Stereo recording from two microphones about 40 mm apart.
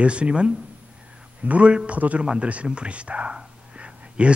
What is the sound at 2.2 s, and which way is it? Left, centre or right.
Speech, right.